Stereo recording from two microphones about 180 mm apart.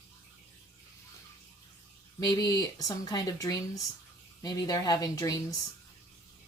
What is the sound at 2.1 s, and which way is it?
Speech, 20° left (ahead or behind).